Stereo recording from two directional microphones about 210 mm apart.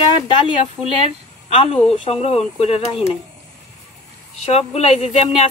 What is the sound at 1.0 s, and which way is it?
A woman's voice, 25° left (ahead or behind).